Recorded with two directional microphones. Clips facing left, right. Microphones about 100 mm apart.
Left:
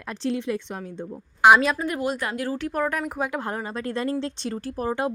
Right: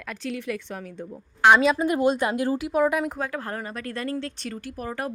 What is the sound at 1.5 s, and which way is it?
Speech, centre (ahead or behind).